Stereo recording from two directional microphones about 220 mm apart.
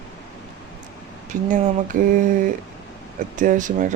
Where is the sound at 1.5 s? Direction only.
35° right (ahead or behind).